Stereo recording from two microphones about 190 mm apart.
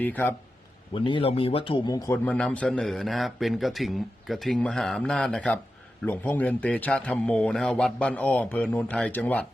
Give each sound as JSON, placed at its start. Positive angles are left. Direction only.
{"t": 0.0, "sound": "a man's voice", "side_deg": 10}
{"t": 0.9, "sound": "speech", "side_deg": 25}
{"t": 2.1, "sound": "a man's voice", "side_deg": 5}